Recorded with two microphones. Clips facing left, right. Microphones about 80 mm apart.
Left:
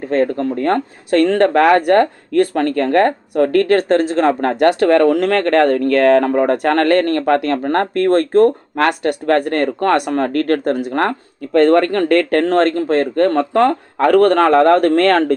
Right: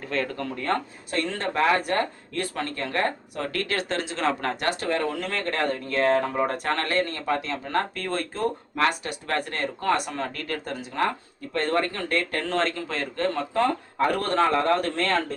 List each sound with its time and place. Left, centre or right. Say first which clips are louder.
0.0 s speech: left 12 dB; left
4.7 s speech: left 15 dB; left